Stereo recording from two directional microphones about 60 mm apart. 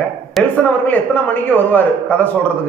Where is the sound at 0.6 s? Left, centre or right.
Left.